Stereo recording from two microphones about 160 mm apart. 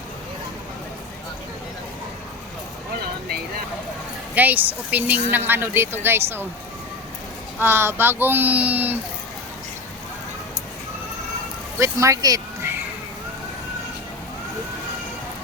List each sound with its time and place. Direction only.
4.4 s a woman's voice: 10° right (ahead or behind)
7.6 s a woman's voice: 15° right (ahead or behind)
11.8 s speech: 20° right (ahead or behind)